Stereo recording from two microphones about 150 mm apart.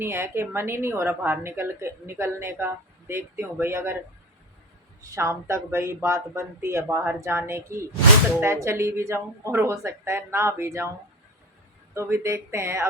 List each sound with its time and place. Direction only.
0.0 s a woman's voice: 15° right (ahead or behind)
5.1 s a woman's voice: 20° right (ahead or behind)
11.9 s a woman's voice: 20° right (ahead or behind)